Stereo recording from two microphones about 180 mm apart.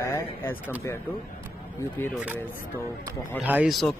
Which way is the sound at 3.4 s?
5° right (ahead or behind).